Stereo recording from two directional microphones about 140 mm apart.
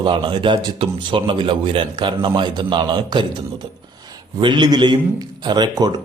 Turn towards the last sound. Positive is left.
turn(degrees=-30)  # may be behind; listen again after turning